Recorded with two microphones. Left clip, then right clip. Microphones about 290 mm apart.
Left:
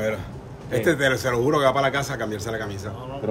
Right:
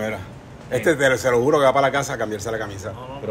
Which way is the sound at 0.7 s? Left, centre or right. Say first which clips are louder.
Right 3 dB; centre.